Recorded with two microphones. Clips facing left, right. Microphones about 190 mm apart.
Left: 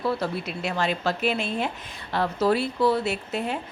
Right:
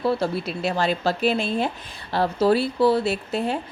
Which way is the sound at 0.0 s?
30° right (ahead or behind).